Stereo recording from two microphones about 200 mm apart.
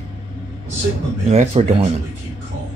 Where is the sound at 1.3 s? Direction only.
30° right (ahead or behind).